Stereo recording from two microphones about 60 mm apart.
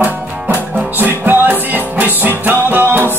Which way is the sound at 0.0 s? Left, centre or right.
Right.